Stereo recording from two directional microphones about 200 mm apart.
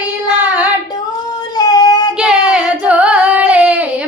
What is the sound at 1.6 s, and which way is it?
Singing, 20° left (ahead or behind).